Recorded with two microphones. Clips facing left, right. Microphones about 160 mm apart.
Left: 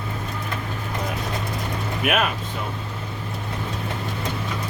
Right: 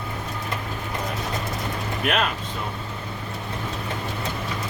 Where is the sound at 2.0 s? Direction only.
5° left (ahead or behind).